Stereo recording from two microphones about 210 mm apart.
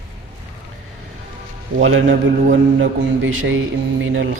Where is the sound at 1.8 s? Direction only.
70° right (ahead or behind).